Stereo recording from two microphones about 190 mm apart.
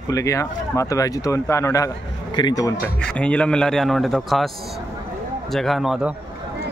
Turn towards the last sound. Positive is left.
turn(degrees=0)  # may be behind; listen again after turning